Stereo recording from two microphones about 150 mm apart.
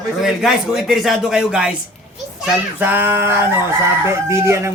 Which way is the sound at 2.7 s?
15° right (ahead or behind).